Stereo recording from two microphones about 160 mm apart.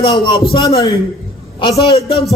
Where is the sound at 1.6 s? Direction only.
30° left (ahead or behind).